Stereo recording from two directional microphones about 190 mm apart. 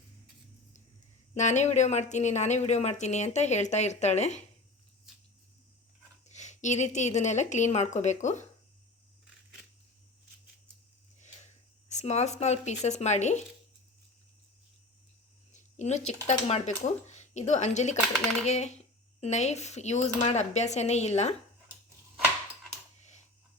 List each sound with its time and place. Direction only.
1.4 s speech: 40° left (ahead or behind)
6.2 s speech: 40° left (ahead or behind)
11.9 s speech: 35° left (ahead or behind)
15.5 s a sound: 35° left (ahead or behind)
16.2 s speech: 35° left (ahead or behind)